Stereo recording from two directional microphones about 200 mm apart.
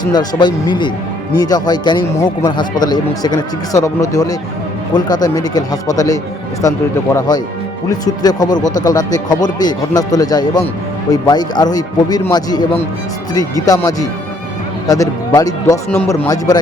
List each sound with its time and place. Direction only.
0.1 s speech: 20° left (ahead or behind)